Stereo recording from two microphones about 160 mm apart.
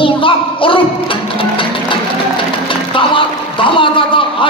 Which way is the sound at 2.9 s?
35° left (ahead or behind).